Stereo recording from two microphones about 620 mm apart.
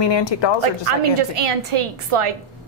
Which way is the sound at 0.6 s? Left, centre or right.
Right.